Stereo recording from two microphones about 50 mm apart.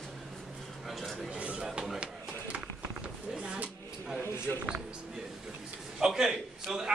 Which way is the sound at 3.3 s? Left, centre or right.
Right.